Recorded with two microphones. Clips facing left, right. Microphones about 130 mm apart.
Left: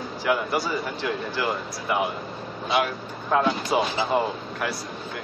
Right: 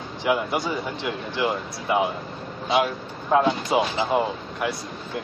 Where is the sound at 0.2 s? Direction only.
20° right (ahead or behind).